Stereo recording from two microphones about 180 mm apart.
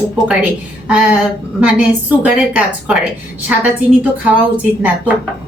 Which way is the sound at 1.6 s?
10° right (ahead or behind).